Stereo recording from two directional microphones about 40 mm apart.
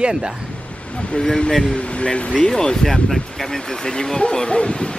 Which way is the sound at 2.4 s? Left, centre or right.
Centre.